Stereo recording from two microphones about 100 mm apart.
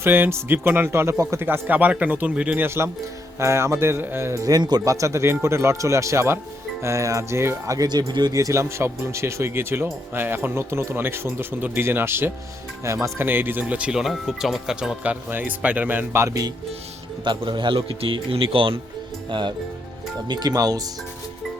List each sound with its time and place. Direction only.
0.0 s speech: 20° right (ahead or behind)
2.6 s speech: 25° right (ahead or behind); by 4.9 s 45° right (ahead or behind)
4.9 s speech: 30° right (ahead or behind)
16.2 s speech: 35° right (ahead or behind)
17.2 s speech: 50° right (ahead or behind)
19.3 s speech: 50° right (ahead or behind)